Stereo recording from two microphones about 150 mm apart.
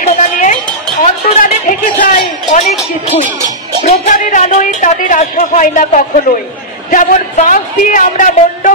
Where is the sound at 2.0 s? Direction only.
65° left (ahead or behind).